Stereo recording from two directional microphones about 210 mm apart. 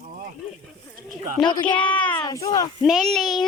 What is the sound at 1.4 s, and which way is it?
Speech, 20° left (ahead or behind).